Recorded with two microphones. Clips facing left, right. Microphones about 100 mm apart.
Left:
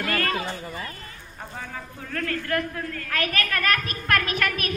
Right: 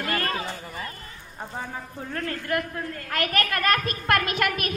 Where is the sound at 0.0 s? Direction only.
25° right (ahead or behind).